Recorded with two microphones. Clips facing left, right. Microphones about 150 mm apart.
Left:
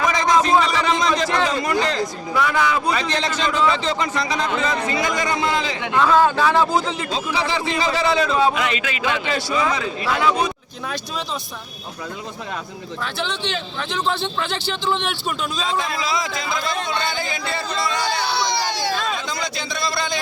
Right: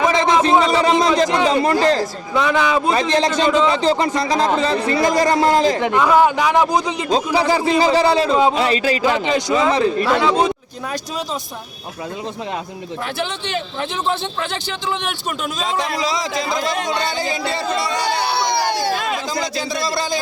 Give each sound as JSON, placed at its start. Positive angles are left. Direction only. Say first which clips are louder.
{"t": 0.0, "sound": "a sound", "louder": "right 3 dB", "side_deg": -25}
{"t": 1.6, "sound": "a man's voice", "louder": "right 6 dB", "side_deg": -35}
{"t": 2.3, "sound": "a man's voice", "louder": "right 3 dB", "side_deg": -20}
{"t": 3.7, "sound": "a man's voice", "louder": "right 5 dB", "side_deg": -35}
{"t": 6.0, "sound": "a man's voice", "louder": "even", "side_deg": -15}
{"t": 7.1, "sound": "a man's voice", "louder": "right 9 dB", "side_deg": -40}
{"t": 9.2, "sound": "a man's voice", "louder": "right 5 dB", "side_deg": -20}
{"t": 13.1, "sound": "speech", "louder": "right 1 dB", "side_deg": -50}
{"t": 13.9, "sound": "a man's voice", "louder": "even", "side_deg": -20}
{"t": 15.6, "sound": "a man's voice", "louder": "right 4 dB", "side_deg": -35}
{"t": 18.3, "sound": "a sound", "louder": "right 3 dB", "side_deg": -55}
{"t": 19.4, "sound": "a man's voice", "louder": "right 4 dB", "side_deg": -35}